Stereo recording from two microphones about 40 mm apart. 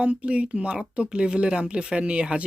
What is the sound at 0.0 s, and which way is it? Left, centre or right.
Speech, right.